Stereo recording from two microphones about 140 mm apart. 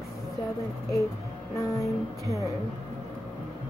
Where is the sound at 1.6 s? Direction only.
25° left (ahead or behind).